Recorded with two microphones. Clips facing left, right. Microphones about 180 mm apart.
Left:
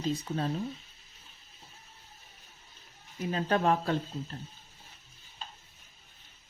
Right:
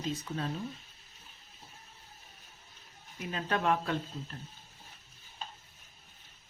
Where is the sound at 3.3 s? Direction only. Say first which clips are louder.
Left 3 dB; 35° left (ahead or behind).